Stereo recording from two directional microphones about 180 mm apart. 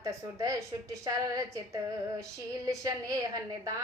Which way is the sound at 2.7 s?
20° right (ahead or behind).